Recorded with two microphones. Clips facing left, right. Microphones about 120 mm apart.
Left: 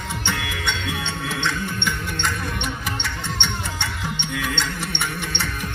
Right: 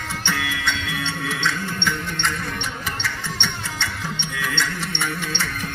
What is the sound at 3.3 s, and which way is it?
Music, 15° left (ahead or behind).